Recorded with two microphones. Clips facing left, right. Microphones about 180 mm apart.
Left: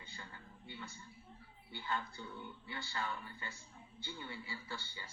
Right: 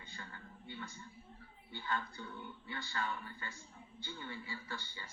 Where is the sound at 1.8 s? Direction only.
30° left (ahead or behind).